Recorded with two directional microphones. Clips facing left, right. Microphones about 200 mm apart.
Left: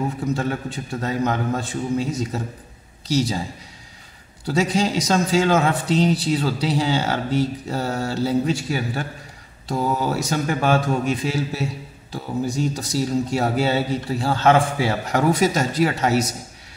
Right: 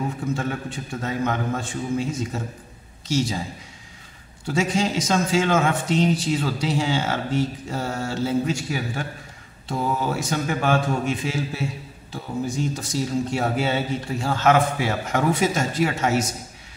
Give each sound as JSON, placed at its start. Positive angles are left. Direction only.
{"t": 0.3, "sound": "a man's voice", "side_deg": 35}
{"t": 4.5, "sound": "a man's voice", "side_deg": 35}
{"t": 9.7, "sound": "a man's voice", "side_deg": 40}